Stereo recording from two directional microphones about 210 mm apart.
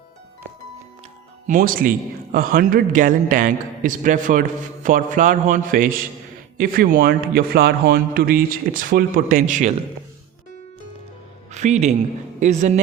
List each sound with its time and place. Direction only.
1.5 s a man's voice: 40° right (ahead or behind)
11.5 s a man's voice: 35° right (ahead or behind)